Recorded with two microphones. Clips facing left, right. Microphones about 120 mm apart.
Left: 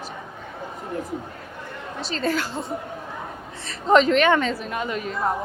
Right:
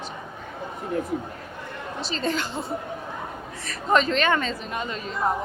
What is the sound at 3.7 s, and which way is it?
A woman's voice, 20° left (ahead or behind).